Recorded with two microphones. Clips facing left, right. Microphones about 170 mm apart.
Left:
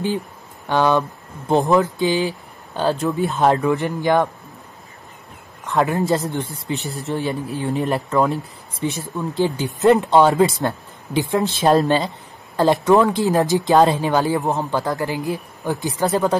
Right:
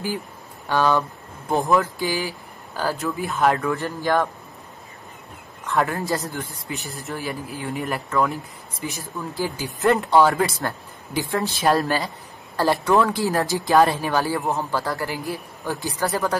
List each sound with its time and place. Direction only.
0.7 s speech: 20° left (ahead or behind)
5.7 s speech: 20° left (ahead or behind)